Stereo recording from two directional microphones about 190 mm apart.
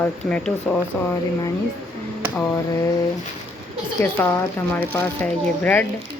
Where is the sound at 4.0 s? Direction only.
15° left (ahead or behind).